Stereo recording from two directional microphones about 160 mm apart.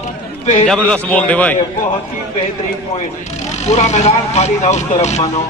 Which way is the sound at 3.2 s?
45° left (ahead or behind).